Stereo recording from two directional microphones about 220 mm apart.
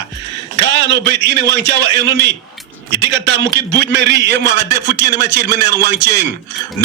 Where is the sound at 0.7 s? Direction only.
50° right (ahead or behind).